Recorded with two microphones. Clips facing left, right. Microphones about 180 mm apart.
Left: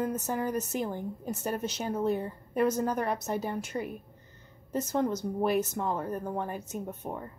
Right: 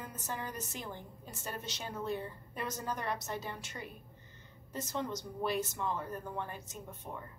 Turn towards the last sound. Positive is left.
turn(degrees=50)  # may be behind; listen again after turning